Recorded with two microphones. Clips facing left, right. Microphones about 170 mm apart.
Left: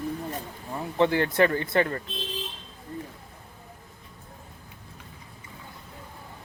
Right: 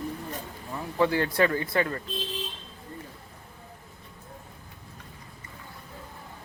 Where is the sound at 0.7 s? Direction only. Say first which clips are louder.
Left 2 dB; 20° left (ahead or behind).